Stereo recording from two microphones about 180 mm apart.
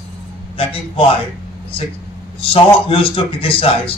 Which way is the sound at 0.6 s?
30° left (ahead or behind).